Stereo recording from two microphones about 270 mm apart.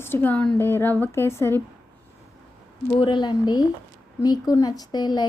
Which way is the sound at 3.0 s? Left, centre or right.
Centre.